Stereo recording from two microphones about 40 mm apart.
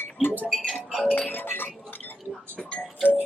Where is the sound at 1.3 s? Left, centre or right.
Left.